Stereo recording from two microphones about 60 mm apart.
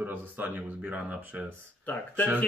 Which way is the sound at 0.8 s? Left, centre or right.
Right.